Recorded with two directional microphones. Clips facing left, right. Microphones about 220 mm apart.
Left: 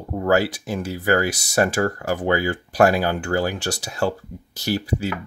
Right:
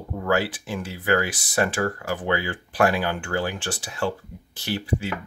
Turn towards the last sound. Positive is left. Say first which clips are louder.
# left 3 dB
turn(degrees=40)  # may be behind; listen again after turning